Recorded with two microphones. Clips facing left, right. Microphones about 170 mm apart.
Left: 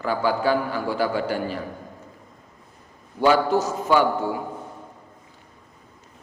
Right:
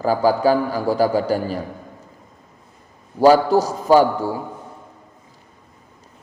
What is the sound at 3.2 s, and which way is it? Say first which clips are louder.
A man's voice: right 6 dB; 35° right (ahead or behind).